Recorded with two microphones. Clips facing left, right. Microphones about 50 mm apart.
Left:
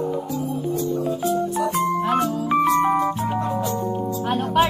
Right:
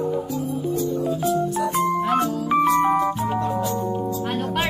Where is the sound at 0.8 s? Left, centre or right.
Centre.